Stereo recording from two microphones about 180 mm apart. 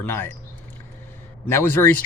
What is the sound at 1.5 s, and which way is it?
Speech, 15° left (ahead or behind).